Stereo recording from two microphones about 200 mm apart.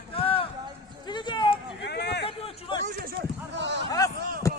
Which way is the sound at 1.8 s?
55° left (ahead or behind).